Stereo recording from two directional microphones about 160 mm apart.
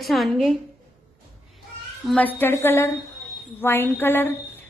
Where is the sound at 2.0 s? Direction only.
10° left (ahead or behind).